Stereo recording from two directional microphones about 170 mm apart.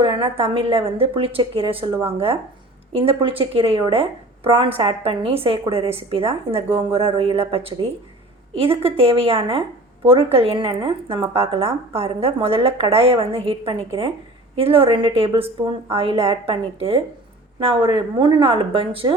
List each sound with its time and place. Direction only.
0.0 s a woman's voice: 30° right (ahead or behind)